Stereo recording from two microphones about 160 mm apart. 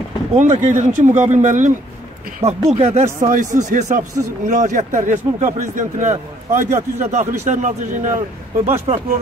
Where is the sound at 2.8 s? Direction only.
40° right (ahead or behind).